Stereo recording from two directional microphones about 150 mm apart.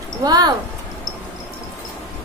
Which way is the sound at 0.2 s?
25° right (ahead or behind).